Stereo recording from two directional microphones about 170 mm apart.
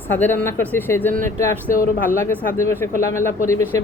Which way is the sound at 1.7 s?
55° left (ahead or behind).